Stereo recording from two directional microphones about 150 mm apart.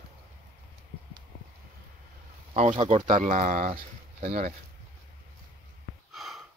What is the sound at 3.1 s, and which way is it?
Speech, 55° right (ahead or behind).